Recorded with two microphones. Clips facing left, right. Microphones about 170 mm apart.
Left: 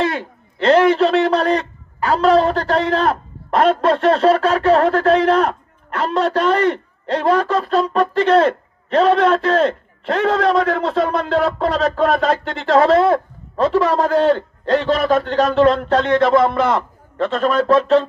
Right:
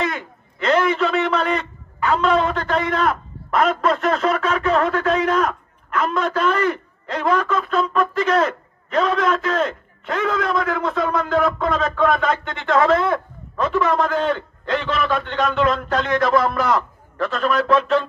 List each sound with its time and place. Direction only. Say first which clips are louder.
0.0 s a man's voice: left 4 dB; 30° left (ahead or behind)